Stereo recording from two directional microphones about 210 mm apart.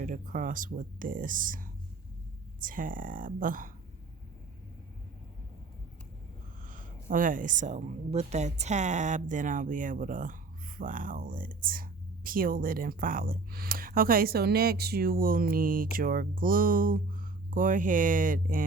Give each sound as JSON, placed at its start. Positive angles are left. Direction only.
{"t": 0.0, "sound": "speech", "side_deg": -40}
{"t": 6.7, "sound": "speech", "side_deg": -40}